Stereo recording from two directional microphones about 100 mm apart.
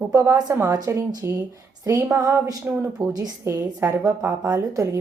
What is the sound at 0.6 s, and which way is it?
Speech, 40° right (ahead or behind).